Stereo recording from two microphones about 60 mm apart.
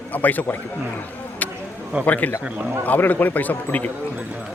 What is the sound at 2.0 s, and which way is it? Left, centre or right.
A man's voice, left.